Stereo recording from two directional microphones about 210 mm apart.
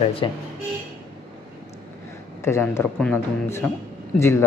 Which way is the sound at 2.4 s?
10° left (ahead or behind).